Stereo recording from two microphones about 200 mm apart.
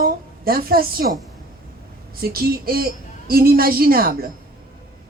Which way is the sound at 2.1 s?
50° right (ahead or behind).